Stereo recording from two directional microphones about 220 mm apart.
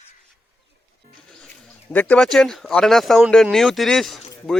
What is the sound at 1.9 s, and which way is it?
Speech, 5° left (ahead or behind).